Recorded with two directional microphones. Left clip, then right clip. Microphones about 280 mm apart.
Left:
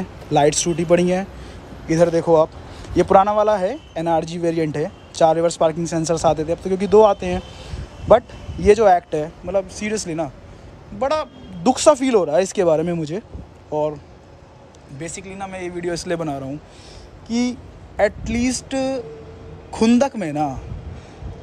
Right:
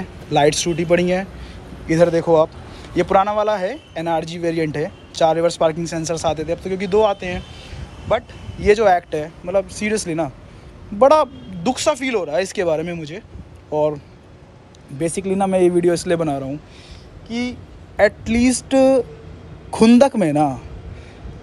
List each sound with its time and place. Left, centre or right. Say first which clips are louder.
0.0 s a man's voice: right 1 dB; centre
11.6 s a man's voice: left 4 dB; centre
15.0 s speech: right 11 dB; centre
17.3 s a man's voice: left 2 dB; centre
17.9 s speech: right 3 dB; centre